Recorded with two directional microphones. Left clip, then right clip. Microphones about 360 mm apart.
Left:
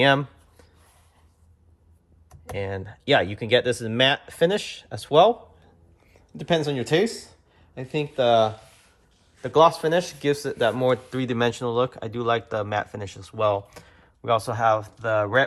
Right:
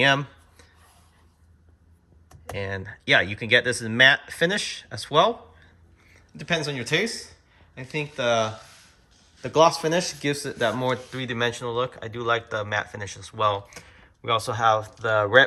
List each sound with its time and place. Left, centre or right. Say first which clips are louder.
0.0 s a sound: left 1 dB; centre
2.5 s speech: left 1 dB; centre
6.3 s speech: left 3 dB; centre